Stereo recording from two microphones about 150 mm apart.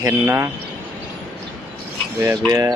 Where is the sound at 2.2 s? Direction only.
20° right (ahead or behind).